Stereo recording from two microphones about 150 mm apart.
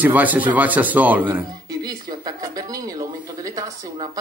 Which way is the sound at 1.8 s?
25° right (ahead or behind).